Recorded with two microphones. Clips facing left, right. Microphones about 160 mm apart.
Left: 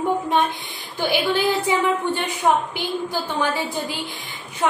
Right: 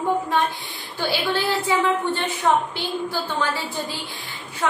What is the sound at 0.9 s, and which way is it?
A woman's voice, 15° left (ahead or behind).